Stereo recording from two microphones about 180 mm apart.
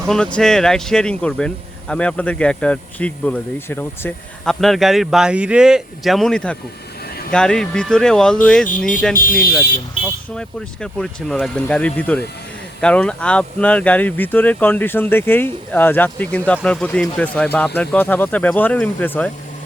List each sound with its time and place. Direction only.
0.1 s speech: 5° left (ahead or behind)
9.1 s speech: 50° left (ahead or behind)
10.0 s speech: 5° left (ahead or behind)